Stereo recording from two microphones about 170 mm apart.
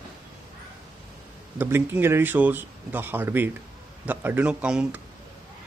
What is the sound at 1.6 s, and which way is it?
Speech, 15° right (ahead or behind).